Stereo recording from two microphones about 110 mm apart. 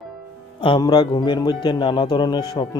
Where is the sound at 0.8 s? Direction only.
40° left (ahead or behind).